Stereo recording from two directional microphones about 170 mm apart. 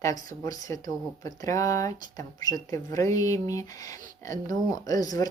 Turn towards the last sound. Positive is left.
turn(degrees=20)  # may be behind; listen again after turning